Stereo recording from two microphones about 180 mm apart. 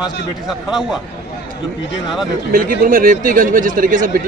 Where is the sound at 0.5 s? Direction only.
5° right (ahead or behind).